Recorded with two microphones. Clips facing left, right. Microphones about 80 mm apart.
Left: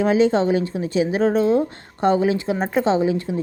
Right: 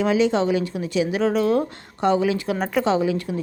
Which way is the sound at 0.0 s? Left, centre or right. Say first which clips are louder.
Left 2 dB; left.